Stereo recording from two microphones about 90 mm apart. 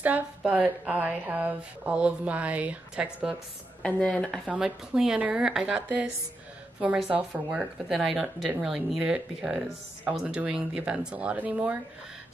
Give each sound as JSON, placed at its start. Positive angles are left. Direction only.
{"t": 0.0, "sound": "speech", "side_deg": -15}
{"t": 3.8, "sound": "speech", "side_deg": 10}
{"t": 4.6, "sound": "speech", "side_deg": -5}
{"t": 5.8, "sound": "speech", "side_deg": -15}
{"t": 7.9, "sound": "speech", "side_deg": -5}